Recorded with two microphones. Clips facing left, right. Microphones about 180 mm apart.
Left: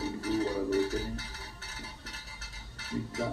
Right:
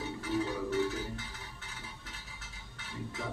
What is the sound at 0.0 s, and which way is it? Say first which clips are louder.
Music: left 3 dB; 40° left (ahead or behind).